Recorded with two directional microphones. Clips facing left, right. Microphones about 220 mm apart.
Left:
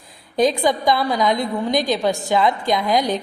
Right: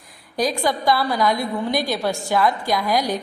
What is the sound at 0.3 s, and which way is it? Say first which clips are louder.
A woman's voice: left 4 dB; 20° left (ahead or behind).